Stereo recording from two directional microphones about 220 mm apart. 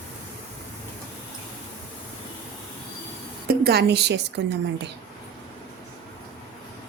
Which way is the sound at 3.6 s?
45° right (ahead or behind).